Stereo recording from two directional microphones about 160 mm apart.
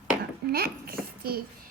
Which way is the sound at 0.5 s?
70° right (ahead or behind).